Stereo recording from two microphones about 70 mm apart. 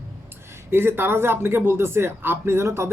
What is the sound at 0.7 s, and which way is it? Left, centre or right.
A man's voice, right.